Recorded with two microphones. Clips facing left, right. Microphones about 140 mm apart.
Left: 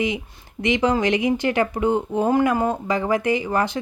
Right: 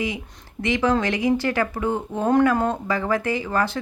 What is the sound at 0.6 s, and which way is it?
Speech, 20° left (ahead or behind).